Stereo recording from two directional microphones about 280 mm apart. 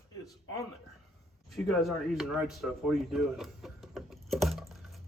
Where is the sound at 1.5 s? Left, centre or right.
Centre.